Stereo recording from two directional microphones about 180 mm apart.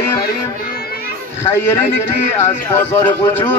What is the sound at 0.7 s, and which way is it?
Children playing, 55° left (ahead or behind).